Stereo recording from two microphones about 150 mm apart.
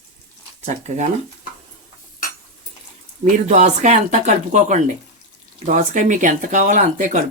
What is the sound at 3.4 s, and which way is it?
Speech, 50° right (ahead or behind).